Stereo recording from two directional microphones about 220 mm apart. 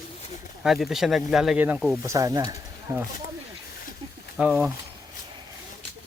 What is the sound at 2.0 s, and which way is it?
Speech, 15° right (ahead or behind).